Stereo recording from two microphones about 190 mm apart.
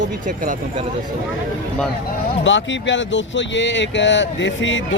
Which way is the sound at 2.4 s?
75° left (ahead or behind).